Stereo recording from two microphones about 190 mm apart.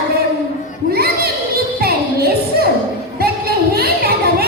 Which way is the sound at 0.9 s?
55° right (ahead or behind).